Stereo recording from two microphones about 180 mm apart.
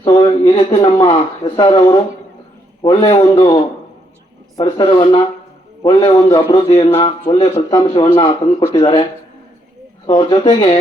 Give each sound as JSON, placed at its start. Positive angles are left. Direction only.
{"t": 0.0, "sound": "a sound", "side_deg": 30}
{"t": 1.0, "sound": "a man's voice", "side_deg": 25}
{"t": 4.8, "sound": "a man's voice", "side_deg": 25}
{"t": 10.1, "sound": "a man's voice", "side_deg": 25}